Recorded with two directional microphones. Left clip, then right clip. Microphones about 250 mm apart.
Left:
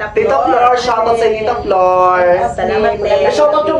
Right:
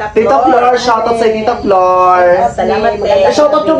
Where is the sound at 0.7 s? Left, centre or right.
Centre.